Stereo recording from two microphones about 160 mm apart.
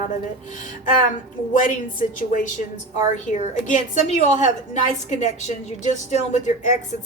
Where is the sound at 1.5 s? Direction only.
55° left (ahead or behind).